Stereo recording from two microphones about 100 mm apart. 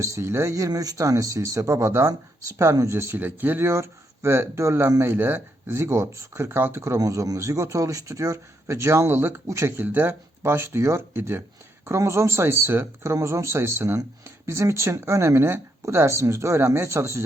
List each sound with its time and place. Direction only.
0.0 s speech: 30° right (ahead or behind)